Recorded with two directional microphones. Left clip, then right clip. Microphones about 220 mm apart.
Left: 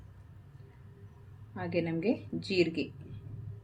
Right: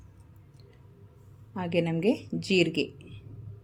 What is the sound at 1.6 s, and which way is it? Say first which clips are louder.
Speech: right 5 dB; 40° right (ahead or behind).